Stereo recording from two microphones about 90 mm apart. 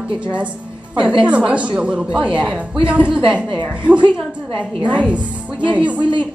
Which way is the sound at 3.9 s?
60° right (ahead or behind).